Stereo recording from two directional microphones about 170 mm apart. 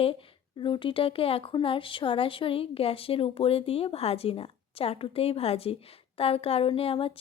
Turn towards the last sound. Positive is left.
turn(degrees=35)  # may be behind; listen again after turning